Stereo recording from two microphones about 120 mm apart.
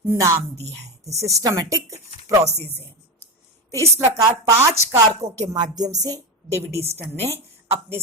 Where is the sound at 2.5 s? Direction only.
20° left (ahead or behind).